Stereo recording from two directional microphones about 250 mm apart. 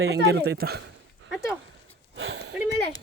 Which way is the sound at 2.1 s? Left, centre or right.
Right.